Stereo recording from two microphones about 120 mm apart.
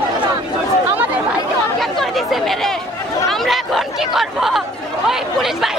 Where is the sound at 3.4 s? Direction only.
Centre (ahead or behind).